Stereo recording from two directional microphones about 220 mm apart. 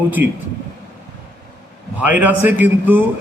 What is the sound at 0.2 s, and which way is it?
Speech, 50° right (ahead or behind).